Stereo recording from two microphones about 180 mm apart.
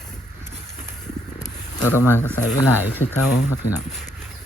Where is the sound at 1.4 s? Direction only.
10° right (ahead or behind).